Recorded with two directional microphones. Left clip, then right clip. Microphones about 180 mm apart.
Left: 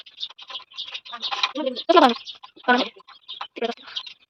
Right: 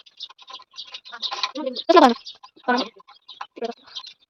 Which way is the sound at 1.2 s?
Centre (ahead or behind).